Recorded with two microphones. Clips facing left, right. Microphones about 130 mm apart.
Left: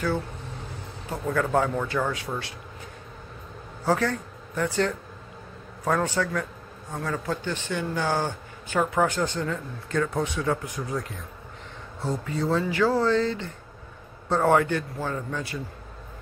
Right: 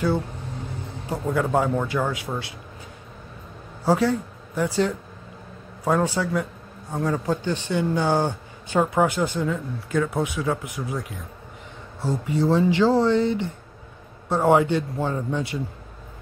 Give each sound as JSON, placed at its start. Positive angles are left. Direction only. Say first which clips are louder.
{"t": 1.0, "sound": "speech", "louder": "right 2 dB", "side_deg": -15}
{"t": 3.8, "sound": "speech", "louder": "right 4 dB", "side_deg": -10}
{"t": 12.5, "sound": "speech", "louder": "right 4 dB", "side_deg": -25}